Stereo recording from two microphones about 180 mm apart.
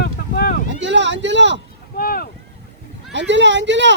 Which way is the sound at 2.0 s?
55° left (ahead or behind).